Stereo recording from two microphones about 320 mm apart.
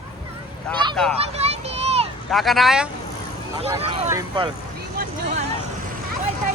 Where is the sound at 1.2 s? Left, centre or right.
Centre.